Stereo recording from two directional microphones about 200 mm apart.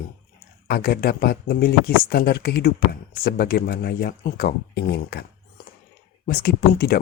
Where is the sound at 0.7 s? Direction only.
50° left (ahead or behind).